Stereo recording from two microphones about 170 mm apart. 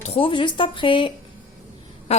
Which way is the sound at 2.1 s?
40° left (ahead or behind).